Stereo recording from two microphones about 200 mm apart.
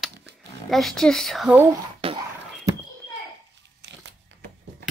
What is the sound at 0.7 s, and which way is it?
Speech, centre (ahead or behind).